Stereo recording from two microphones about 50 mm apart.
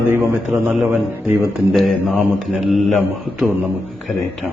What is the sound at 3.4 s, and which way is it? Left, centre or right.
Speech, centre.